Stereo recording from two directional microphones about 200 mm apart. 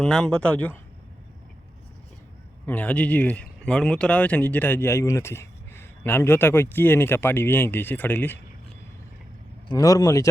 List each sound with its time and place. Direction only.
0.0 s speech: 5° left (ahead or behind)
2.6 s speech: 10° left (ahead or behind)
9.6 s speech: 15° left (ahead or behind)